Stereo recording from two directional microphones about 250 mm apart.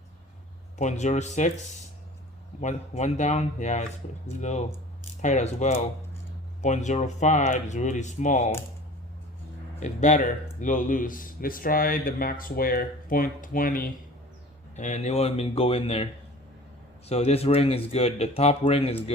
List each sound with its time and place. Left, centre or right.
0.8 s speech: left
9.8 s speech: left
17.1 s speech: left